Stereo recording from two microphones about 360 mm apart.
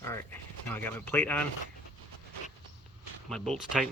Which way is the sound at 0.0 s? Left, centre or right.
Centre.